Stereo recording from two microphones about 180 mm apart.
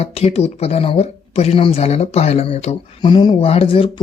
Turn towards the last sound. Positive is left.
turn(degrees=30)  # may be behind; listen again after turning